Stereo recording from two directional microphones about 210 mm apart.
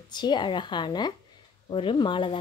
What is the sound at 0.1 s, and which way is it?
Speech, 20° left (ahead or behind).